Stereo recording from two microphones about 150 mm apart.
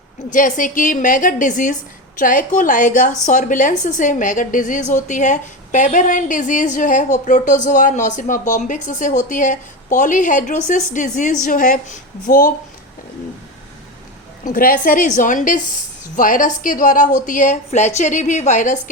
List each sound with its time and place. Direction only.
0.3 s a woman's voice: 60° left (ahead or behind)
14.4 s a woman's voice: 70° left (ahead or behind); by 18.8 s 55° left (ahead or behind)